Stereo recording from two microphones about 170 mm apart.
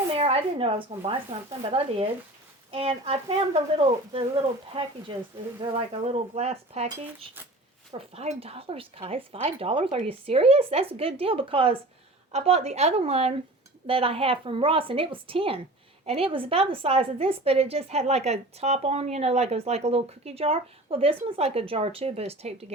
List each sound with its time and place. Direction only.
0.1 s a woman's voice: 35° right (ahead or behind)
7.9 s a woman's voice: 40° right (ahead or behind)